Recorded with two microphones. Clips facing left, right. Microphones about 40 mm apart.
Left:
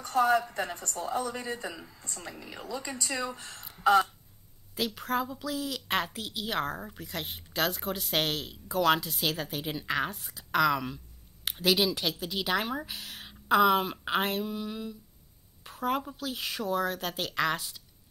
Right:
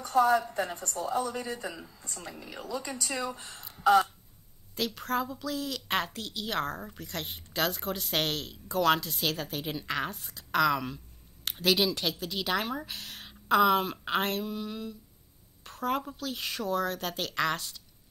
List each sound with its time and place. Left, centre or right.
0.5 s speech: left
1.7 s a woman's voice: centre
2.7 s speech: left
3.3 s speech: centre
3.8 s a sound: centre
4.7 s a woman's voice: centre